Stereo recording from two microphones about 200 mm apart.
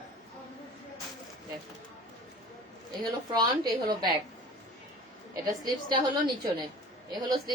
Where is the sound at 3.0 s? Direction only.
20° right (ahead or behind).